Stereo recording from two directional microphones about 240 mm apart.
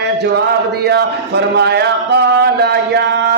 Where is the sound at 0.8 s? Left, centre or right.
Right.